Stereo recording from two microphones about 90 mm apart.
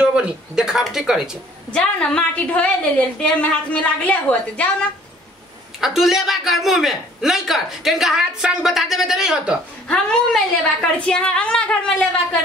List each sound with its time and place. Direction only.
0.0 s speech: 10° right (ahead or behind)
1.7 s a woman's voice: 10° left (ahead or behind)
5.8 s a man's voice: 5° right (ahead or behind)
9.8 s a woman's voice: 10° left (ahead or behind)